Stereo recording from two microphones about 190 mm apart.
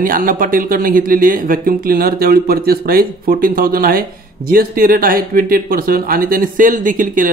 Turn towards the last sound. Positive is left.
turn(degrees=-45)  # may be behind; listen again after turning